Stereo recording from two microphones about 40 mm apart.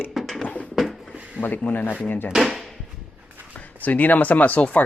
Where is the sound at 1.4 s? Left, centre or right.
Left.